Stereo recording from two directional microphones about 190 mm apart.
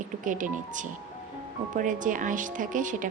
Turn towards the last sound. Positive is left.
turn(degrees=-45)  # may be behind; listen again after turning